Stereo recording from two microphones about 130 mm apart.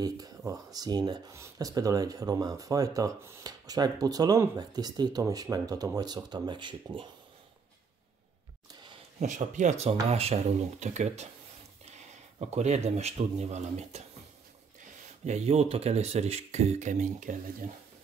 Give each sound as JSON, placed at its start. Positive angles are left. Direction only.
{"t": 0.5, "sound": "speech", "side_deg": -30}
{"t": 9.2, "sound": "speech", "side_deg": -70}
{"t": 12.4, "sound": "speech", "side_deg": -60}
{"t": 15.2, "sound": "speech", "side_deg": -60}